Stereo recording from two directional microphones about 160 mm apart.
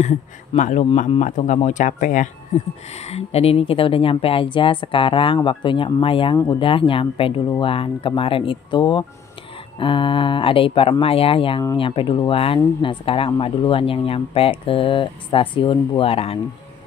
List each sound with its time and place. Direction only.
0.0 s speech: 50° left (ahead or behind)
3.1 s a woman's voice: 40° left (ahead or behind)